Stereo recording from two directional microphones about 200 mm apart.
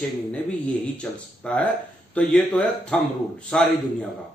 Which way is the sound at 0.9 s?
5° left (ahead or behind).